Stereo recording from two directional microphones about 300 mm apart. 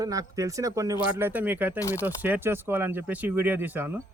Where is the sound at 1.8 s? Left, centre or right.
Centre.